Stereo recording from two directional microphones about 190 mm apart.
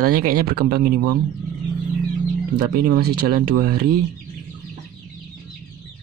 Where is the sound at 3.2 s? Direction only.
55° right (ahead or behind).